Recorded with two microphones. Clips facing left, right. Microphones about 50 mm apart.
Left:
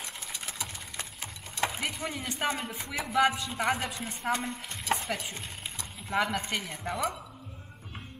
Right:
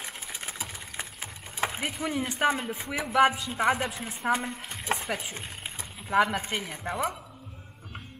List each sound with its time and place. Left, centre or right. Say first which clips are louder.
0.0 s a sound: right 2 dB; centre
2.9 s a man's voice: right 3 dB; right
3.5 s speech: right 4 dB; centre
4.9 s stir: even; centre
6.0 s speech: right 5 dB; centre